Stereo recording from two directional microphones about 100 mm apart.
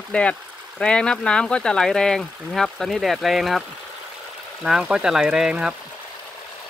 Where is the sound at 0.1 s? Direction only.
10° left (ahead or behind).